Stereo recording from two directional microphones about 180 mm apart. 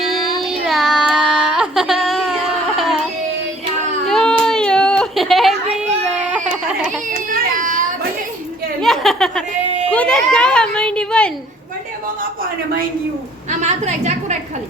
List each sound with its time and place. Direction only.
0.7 s child singing: centre (ahead or behind)
4.0 s a sound: 5° left (ahead or behind)
7.3 s baby cry: 50° right (ahead or behind)
8.8 s a sound: centre (ahead or behind)
9.9 s a woman's voice: 5° left (ahead or behind)
13.6 s a woman's voice: 40° right (ahead or behind)